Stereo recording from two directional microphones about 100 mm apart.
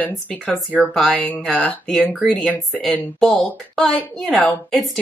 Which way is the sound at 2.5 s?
15° left (ahead or behind).